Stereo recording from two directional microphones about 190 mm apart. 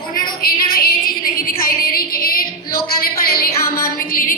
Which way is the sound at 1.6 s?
50° left (ahead or behind).